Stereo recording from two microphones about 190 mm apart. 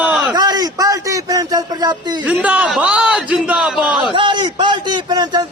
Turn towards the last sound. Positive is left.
turn(degrees=-20)  # may be behind; listen again after turning